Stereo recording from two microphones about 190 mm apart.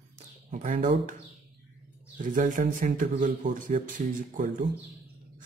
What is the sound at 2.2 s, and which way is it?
Speech, 45° right (ahead or behind).